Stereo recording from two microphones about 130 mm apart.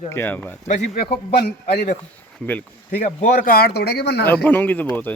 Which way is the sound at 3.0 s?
90° left.